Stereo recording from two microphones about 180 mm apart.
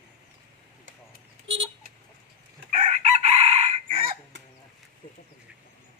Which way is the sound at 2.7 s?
40° right (ahead or behind).